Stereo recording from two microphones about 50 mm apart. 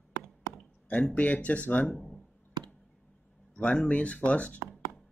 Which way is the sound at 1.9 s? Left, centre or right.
Centre.